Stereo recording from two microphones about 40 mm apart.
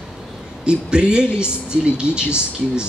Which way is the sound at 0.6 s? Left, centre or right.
Right.